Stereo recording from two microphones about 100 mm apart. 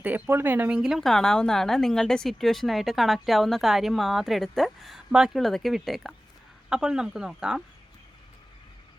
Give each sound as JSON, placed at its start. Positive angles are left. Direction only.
{"t": 0.0, "sound": "speech", "side_deg": -20}
{"t": 0.8, "sound": "a woman's voice", "side_deg": -5}